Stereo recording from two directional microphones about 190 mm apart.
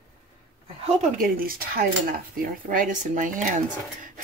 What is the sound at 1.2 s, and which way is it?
Speech, 50° right (ahead or behind).